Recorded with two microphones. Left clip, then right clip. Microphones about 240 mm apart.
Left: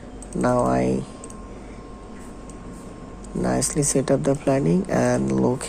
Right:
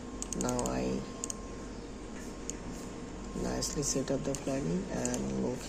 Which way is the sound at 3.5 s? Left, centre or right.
Left.